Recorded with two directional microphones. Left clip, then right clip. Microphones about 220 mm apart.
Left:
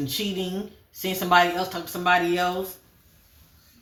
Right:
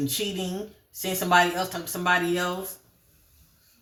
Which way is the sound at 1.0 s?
15° right (ahead or behind).